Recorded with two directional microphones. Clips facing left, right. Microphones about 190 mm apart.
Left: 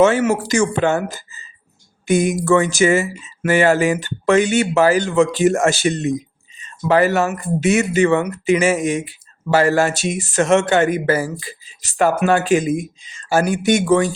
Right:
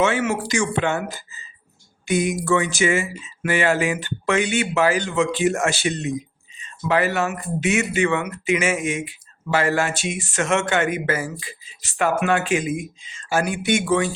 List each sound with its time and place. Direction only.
0.0 s speech: 40° left (ahead or behind)
2.0 s speech: 45° left (ahead or behind)